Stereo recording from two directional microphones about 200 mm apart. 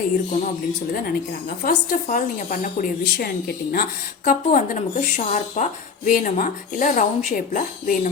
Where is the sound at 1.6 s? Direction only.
40° left (ahead or behind).